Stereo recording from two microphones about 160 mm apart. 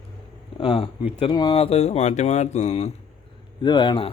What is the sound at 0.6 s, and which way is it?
Speech, 35° left (ahead or behind).